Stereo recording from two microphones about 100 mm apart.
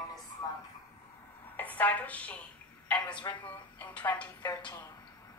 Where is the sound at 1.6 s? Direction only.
15° left (ahead or behind).